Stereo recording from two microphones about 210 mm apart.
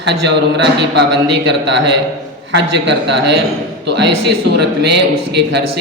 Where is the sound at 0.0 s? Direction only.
55° right (ahead or behind).